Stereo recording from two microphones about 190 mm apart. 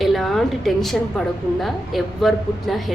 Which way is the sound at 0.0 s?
Centre (ahead or behind).